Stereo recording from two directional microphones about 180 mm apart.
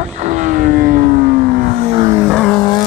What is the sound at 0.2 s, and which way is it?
Vehicle, 45° right (ahead or behind).